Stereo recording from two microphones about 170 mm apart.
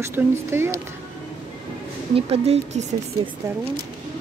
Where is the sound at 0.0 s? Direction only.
15° right (ahead or behind).